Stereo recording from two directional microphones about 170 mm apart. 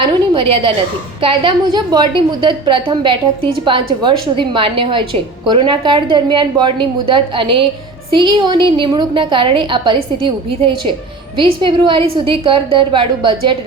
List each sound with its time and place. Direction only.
0.0 s a woman's voice: 30° right (ahead or behind)